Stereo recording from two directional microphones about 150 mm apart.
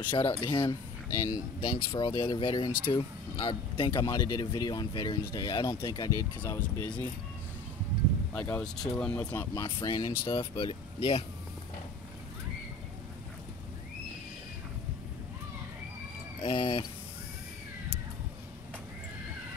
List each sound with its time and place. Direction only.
0.1 s speech: 30° left (ahead or behind); by 7.1 s 15° left (ahead or behind)
8.3 s speech: 10° left (ahead or behind)
9.8 s speech: 30° left (ahead or behind)
16.3 s speech: 40° left (ahead or behind)